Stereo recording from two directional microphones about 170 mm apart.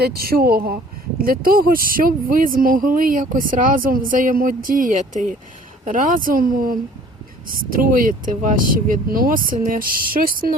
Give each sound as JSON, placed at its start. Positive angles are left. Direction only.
{"t": 0.0, "sound": "speech", "side_deg": -60}